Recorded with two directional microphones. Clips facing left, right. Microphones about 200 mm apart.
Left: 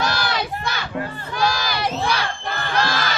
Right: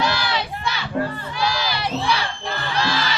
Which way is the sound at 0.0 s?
45° left (ahead or behind).